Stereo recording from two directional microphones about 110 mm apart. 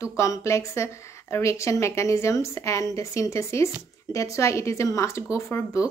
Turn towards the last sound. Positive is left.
turn(degrees=25)  # may be behind; listen again after turning